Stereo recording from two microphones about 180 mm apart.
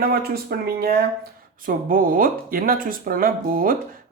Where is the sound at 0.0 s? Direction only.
55° right (ahead or behind).